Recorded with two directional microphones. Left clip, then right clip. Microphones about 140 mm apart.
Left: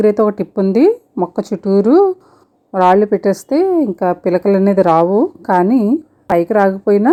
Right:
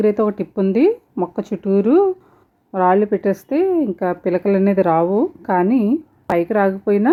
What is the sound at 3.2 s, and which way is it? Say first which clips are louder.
Speech: left 4 dB; centre (ahead or behind).